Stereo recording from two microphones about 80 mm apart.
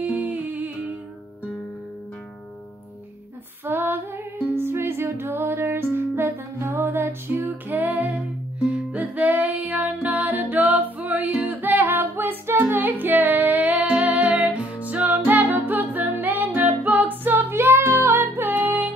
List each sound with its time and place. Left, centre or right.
0.0 s humming: centre
3.6 s music: right